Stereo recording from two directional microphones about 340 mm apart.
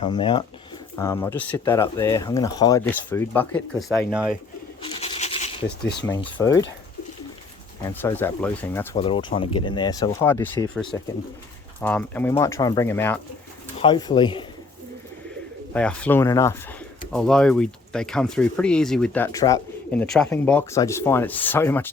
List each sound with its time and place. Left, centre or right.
0.0 s speech: centre
4.8 s a sound: centre
6.0 s speech: centre
8.0 s speech: centre
15.7 s speech: centre